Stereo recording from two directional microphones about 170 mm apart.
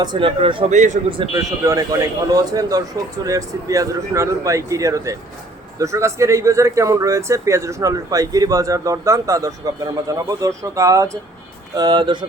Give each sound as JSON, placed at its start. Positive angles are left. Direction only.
{"t": 0.0, "sound": "speech", "side_deg": -30}
{"t": 0.7, "sound": "a man's voice", "side_deg": -45}
{"t": 1.1, "sound": "speech", "side_deg": -30}